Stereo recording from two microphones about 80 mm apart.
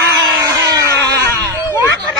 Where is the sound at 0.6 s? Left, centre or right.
Right.